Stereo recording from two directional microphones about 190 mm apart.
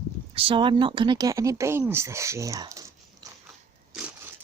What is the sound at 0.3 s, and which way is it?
Speech, 30° right (ahead or behind).